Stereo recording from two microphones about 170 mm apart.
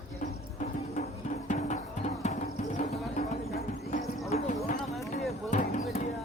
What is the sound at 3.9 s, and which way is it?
Clip-clop, 45° left (ahead or behind).